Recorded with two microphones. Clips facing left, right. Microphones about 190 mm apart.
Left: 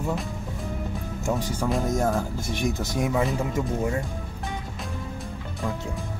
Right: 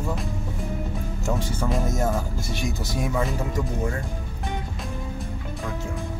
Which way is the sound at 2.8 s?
20° left (ahead or behind).